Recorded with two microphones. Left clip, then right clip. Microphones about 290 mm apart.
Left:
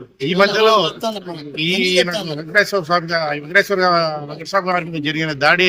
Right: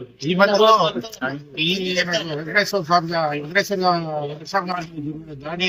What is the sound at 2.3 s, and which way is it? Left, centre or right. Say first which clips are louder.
A man's voice: left 6 dB; centre.